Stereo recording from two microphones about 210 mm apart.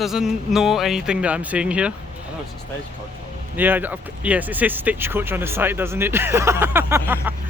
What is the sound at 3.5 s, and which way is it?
Speech, 10° right (ahead or behind).